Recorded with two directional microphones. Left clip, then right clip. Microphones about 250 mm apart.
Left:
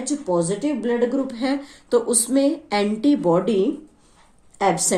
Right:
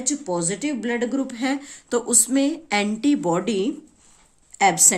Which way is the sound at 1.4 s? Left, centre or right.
Right.